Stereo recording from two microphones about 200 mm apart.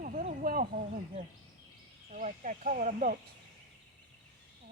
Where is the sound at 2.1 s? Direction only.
40° right (ahead or behind).